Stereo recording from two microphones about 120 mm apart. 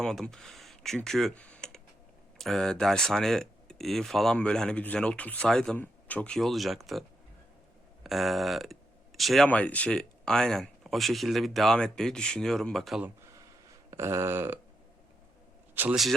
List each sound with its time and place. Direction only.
0.0 s speech: 5° left (ahead or behind)
8.0 s speech: centre (ahead or behind)
9.5 s speech: 10° left (ahead or behind)
13.9 s speech: 25° right (ahead or behind)
15.7 s a man's voice: 15° right (ahead or behind)